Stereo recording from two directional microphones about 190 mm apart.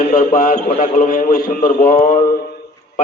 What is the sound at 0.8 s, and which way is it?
A man's voice, 45° left (ahead or behind).